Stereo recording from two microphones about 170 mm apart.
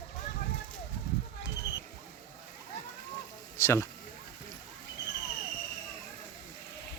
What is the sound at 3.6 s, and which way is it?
Speech, 15° left (ahead or behind).